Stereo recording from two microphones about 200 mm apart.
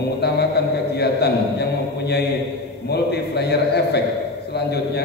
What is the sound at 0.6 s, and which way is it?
Speech, 55° left (ahead or behind).